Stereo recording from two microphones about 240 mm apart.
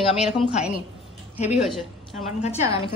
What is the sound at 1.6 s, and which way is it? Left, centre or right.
Speech, centre.